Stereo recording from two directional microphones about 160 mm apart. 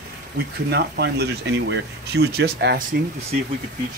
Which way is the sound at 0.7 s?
90° right.